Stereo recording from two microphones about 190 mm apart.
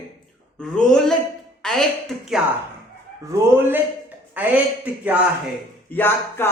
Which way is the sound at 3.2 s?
10° right (ahead or behind).